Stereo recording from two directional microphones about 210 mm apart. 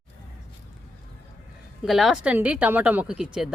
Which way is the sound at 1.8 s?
Centre (ahead or behind).